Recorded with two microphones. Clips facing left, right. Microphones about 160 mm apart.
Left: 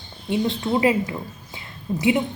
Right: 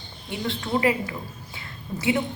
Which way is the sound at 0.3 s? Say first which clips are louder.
Left 6 dB; 20° left (ahead or behind).